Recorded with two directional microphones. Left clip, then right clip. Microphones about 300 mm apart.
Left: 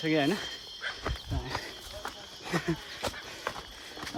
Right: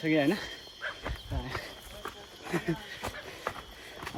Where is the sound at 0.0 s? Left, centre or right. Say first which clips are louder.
Even; centre.